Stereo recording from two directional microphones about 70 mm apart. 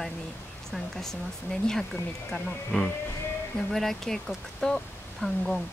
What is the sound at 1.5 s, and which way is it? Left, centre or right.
Speech, centre.